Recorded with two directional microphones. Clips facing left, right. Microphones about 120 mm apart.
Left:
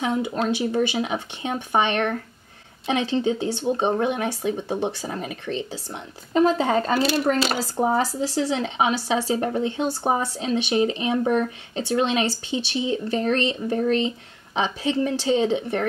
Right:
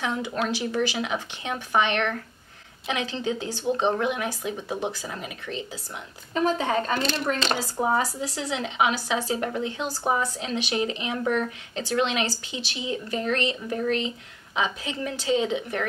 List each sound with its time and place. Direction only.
0.0 s speech: 20° left (ahead or behind)
4.2 s speech: 30° left (ahead or behind)
4.7 s speech: 20° left (ahead or behind)
5.1 s speech: 35° left (ahead or behind)
7.0 s speech: 5° left (ahead or behind)
7.6 s speech: 35° left (ahead or behind)
11.7 s speech: 25° left (ahead or behind)